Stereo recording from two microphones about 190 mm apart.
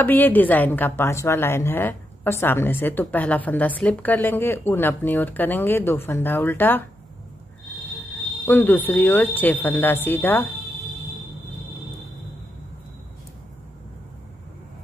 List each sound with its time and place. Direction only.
0.0 s a woman's voice: 10° left (ahead or behind)
8.5 s a woman's voice: 10° left (ahead or behind)